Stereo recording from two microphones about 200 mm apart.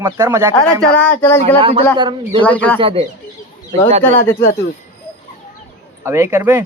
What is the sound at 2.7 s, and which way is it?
Speech, 25° right (ahead or behind).